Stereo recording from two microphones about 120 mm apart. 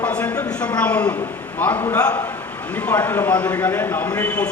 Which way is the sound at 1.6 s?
15° left (ahead or behind).